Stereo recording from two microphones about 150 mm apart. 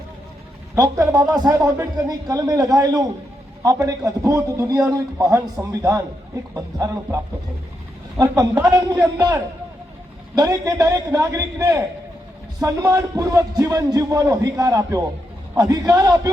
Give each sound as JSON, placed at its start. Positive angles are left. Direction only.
{"t": 0.8, "sound": "a man's voice", "side_deg": -25}
{"t": 8.2, "sound": "a man's voice", "side_deg": -25}
{"t": 10.3, "sound": "a man's voice", "side_deg": -20}